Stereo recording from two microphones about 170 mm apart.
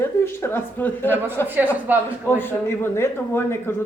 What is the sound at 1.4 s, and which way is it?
Speech, 10° right (ahead or behind).